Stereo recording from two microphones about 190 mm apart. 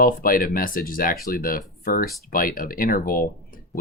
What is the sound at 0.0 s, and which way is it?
Speech, 50° left (ahead or behind).